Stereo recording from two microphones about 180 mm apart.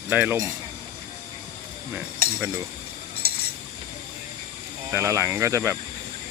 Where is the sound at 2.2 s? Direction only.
55° right (ahead or behind).